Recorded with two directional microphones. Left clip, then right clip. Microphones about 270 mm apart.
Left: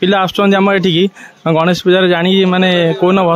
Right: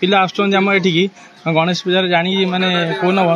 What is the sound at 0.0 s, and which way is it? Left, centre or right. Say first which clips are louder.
Speech: left 2 dB; left.